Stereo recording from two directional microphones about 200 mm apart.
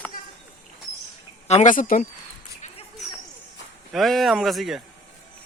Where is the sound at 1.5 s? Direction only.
35° left (ahead or behind).